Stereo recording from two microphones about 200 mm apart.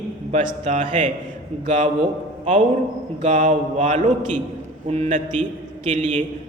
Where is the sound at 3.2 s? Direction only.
40° right (ahead or behind).